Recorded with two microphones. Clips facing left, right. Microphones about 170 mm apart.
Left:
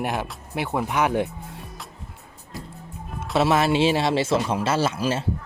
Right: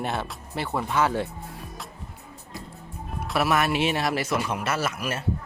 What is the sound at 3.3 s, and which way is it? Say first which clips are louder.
Speech: left 4 dB; 25° left (ahead or behind).